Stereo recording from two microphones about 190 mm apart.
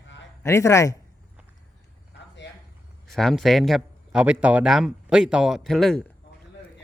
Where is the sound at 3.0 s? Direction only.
Centre (ahead or behind).